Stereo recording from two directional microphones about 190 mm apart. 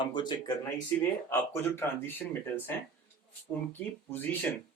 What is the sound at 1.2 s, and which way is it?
Speech, 15° left (ahead or behind).